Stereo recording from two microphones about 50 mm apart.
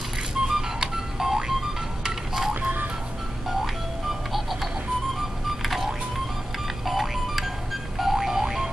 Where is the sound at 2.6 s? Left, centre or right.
Right.